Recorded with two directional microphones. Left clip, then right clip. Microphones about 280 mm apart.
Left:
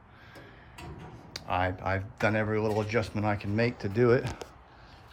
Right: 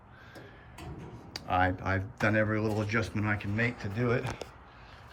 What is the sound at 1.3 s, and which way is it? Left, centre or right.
Speech, centre.